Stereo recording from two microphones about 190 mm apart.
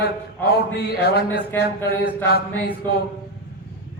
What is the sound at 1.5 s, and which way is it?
Speech, 10° left (ahead or behind).